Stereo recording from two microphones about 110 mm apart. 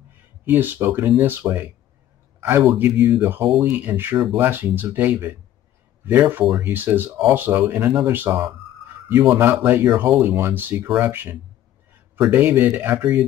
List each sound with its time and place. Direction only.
0.5 s a man's voice: 20° right (ahead or behind)